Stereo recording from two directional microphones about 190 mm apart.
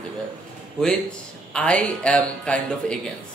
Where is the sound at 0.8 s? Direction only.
5° left (ahead or behind).